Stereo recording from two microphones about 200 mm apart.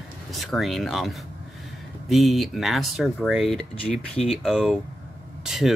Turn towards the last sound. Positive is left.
turn(degrees=0)  # may be behind; listen again after turning